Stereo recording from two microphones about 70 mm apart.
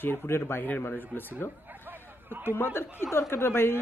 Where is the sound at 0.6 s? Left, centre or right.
Left.